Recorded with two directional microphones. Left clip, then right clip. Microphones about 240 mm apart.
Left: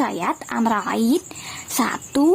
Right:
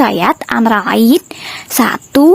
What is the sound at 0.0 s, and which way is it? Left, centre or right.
A woman's voice, right.